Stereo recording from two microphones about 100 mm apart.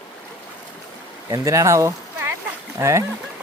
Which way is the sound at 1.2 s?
35° right (ahead or behind).